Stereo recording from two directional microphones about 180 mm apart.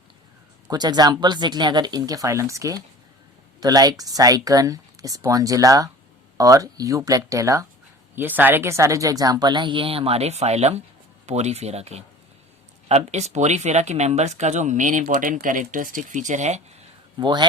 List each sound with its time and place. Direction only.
0.7 s a woman's voice: 20° right (ahead or behind); by 16.6 s 40° right (ahead or behind)
17.2 s a woman's voice: 25° right (ahead or behind)